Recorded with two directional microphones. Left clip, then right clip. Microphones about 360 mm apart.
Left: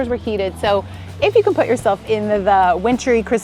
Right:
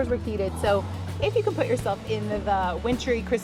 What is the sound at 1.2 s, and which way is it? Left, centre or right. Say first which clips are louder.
Speech: left 11 dB; left.